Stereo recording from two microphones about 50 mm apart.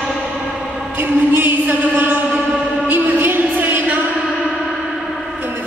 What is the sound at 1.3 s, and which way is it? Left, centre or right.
Music, right.